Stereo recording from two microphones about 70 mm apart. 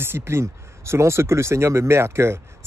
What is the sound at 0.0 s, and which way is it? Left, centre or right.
Speech, right.